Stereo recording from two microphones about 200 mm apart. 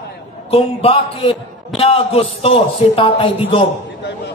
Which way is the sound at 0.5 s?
30° left (ahead or behind).